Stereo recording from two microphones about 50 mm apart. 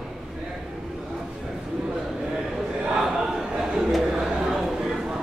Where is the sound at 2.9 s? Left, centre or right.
Centre.